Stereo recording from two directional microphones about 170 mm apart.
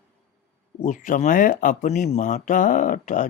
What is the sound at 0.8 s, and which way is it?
Speech, 50° left (ahead or behind).